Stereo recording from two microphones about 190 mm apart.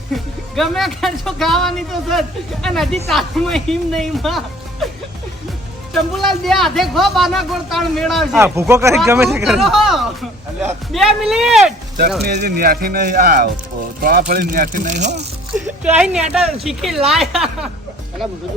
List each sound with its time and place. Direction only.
0.1 s speech: centre (ahead or behind)
5.9 s speech: centre (ahead or behind)
8.4 s speech: 15° right (ahead or behind)
9.4 s speech: centre (ahead or behind)
12.2 s speech: 55° right (ahead or behind); by 15.1 s 40° right (ahead or behind)
15.5 s speech: 5° right (ahead or behind)